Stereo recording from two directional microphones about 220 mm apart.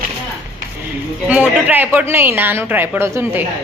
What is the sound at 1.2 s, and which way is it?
A woman's voice, 5° right (ahead or behind).